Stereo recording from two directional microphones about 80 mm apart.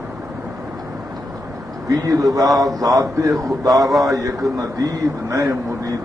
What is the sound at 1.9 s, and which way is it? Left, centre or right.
A man's voice, right.